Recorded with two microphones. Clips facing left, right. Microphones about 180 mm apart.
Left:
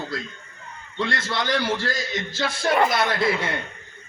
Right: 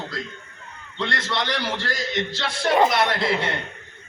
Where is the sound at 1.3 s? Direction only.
25° right (ahead or behind).